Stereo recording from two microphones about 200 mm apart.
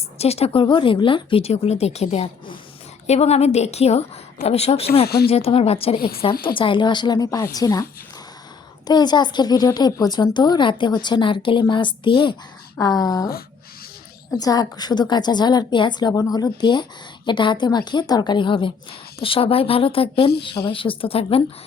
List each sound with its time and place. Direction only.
0.2 s speech: 30° left (ahead or behind)
5.0 s speech: 50° left (ahead or behind)
5.3 s a woman's voice: 30° left (ahead or behind)
6.0 s speech: 50° left (ahead or behind)
6.6 s a woman's voice: 25° left (ahead or behind)
8.9 s a woman's voice: 20° left (ahead or behind)
12.7 s a sound: 20° left (ahead or behind)
14.3 s a woman's voice: 20° left (ahead or behind)